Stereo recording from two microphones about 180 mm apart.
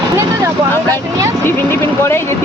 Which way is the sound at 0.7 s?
10° left (ahead or behind).